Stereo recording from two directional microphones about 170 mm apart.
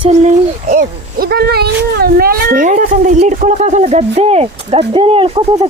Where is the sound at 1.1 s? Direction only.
65° right (ahead or behind).